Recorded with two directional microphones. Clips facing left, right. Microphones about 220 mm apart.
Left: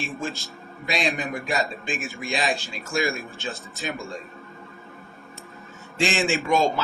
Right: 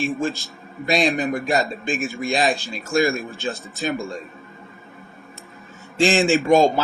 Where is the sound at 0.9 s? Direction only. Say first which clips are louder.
Right 7 dB; 45° right (ahead or behind).